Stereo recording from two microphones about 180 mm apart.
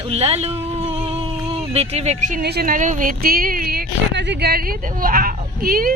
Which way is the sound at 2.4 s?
60° right (ahead or behind).